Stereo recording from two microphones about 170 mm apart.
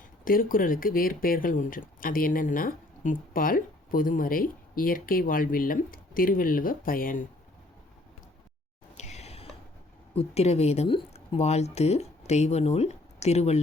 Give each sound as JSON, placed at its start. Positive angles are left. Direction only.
{"t": 0.3, "sound": "speech", "side_deg": 55}
{"t": 9.0, "sound": "whispering", "side_deg": 40}
{"t": 10.2, "sound": "speech", "side_deg": 40}